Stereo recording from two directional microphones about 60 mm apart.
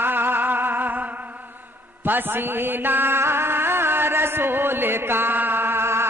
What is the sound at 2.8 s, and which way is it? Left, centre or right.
Music, right.